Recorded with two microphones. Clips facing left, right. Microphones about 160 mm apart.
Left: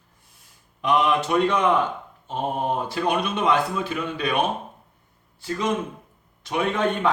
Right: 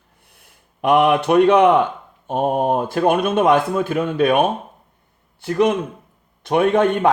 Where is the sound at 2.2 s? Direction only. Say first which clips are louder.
Right 7 dB; 55° right (ahead or behind).